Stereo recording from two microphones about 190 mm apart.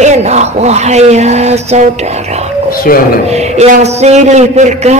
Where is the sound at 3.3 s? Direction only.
35° right (ahead or behind).